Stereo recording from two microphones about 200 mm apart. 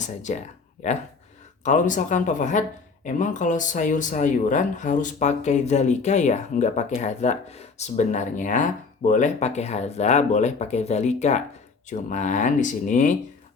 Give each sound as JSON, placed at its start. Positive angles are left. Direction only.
{"t": 0.0, "sound": "speech", "side_deg": 35}